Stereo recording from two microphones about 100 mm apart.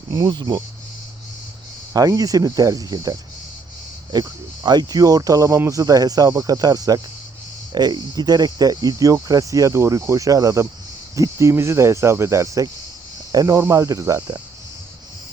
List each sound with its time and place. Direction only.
0.1 s speech: 45° right (ahead or behind)
1.9 s speech: 35° right (ahead or behind)